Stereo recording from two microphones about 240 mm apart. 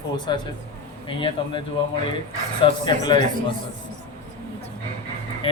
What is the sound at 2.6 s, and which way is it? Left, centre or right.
Speech, left.